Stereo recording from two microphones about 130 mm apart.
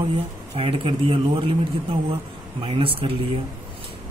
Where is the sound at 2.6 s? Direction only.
45° right (ahead or behind).